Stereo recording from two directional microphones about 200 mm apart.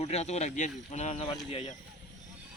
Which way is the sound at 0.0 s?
35° left (ahead or behind).